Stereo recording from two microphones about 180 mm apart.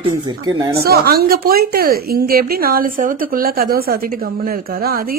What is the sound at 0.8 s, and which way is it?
A woman's voice, 60° right (ahead or behind).